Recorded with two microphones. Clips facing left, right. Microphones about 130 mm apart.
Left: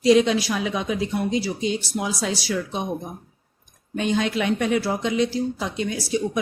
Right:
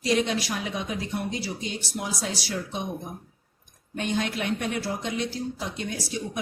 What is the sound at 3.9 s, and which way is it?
Speech, 90° left.